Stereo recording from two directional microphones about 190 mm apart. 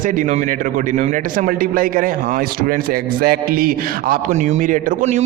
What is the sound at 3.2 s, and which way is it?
A man's voice, 50° right (ahead or behind).